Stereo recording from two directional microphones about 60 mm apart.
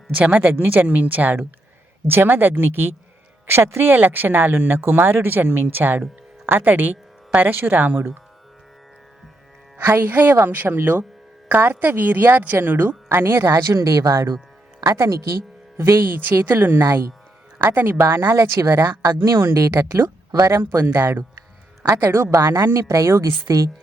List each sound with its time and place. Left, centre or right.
0.2 s speech: right
9.9 s speech: right
13.6 s speech: right
14.8 s a woman's voice: right
15.8 s a woman's voice: right
20.5 s a woman's voice: right